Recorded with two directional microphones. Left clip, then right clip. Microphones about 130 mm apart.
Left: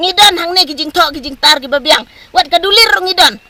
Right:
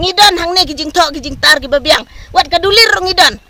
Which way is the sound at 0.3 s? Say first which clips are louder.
Even; 50° right (ahead or behind).